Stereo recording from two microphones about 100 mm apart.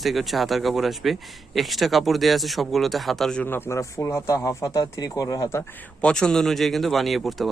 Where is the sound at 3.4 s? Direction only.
20° left (ahead or behind).